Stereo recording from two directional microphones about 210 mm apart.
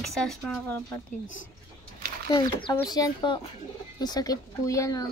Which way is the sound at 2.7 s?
15° left (ahead or behind).